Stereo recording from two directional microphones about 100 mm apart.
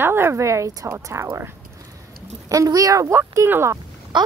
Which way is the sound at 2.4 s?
35° right (ahead or behind).